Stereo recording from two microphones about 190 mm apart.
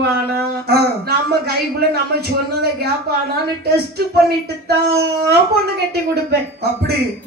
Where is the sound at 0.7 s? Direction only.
55° right (ahead or behind).